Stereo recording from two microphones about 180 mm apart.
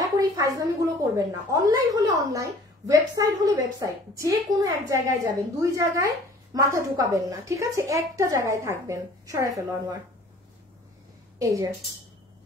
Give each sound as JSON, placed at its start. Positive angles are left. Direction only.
{"t": 0.0, "sound": "a sound", "side_deg": -20}
{"t": 1.1, "sound": "a woman's voice", "side_deg": -20}
{"t": 11.3, "sound": "a woman's voice", "side_deg": -20}